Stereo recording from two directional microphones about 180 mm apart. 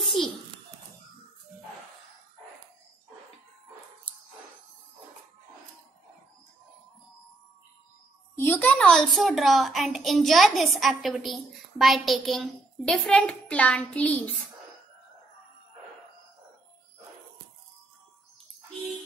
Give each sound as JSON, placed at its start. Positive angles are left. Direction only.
{"t": 8.4, "sound": "a child's voice", "side_deg": 10}